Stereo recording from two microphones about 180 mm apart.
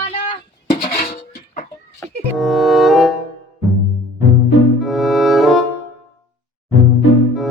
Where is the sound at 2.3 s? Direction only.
Centre (ahead or behind).